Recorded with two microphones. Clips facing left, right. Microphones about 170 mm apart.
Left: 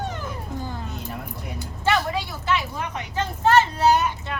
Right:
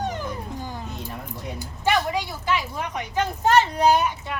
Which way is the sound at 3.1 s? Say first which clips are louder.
Even; 15° right (ahead or behind).